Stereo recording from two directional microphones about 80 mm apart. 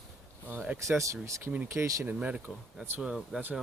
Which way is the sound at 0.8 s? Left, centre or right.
Right.